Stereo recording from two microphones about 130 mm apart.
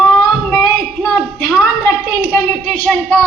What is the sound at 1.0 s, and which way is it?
A woman's voice, 10° left (ahead or behind).